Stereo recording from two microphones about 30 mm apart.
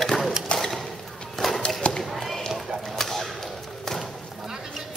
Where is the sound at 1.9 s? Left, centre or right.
Left.